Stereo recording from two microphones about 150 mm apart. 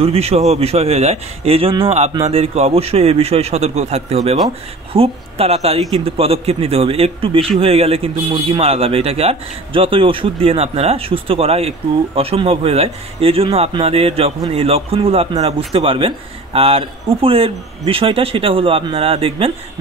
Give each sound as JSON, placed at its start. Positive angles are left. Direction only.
{"t": 0.0, "sound": "speech", "side_deg": -40}